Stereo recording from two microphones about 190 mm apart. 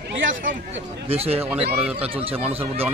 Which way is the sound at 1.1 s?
30° right (ahead or behind).